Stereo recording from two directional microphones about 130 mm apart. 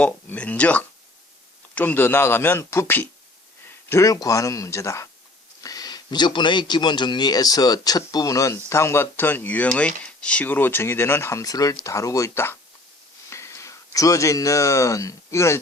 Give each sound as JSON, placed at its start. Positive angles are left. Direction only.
{"t": 0.0, "sound": "speech", "side_deg": 10}